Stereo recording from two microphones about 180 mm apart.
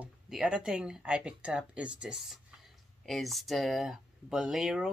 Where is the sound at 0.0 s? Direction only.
5° right (ahead or behind).